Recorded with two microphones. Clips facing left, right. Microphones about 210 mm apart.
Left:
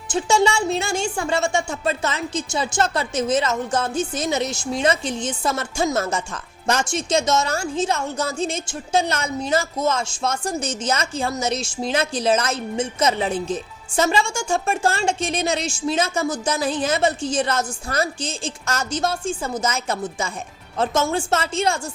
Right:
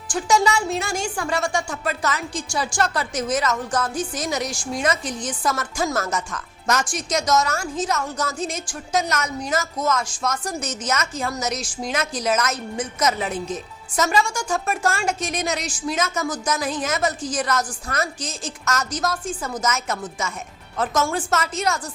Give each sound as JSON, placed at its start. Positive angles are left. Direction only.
{"t": 0.1, "sound": "speech", "side_deg": 25}